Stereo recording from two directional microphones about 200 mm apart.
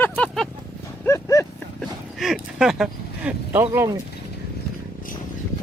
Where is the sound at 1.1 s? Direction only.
15° left (ahead or behind).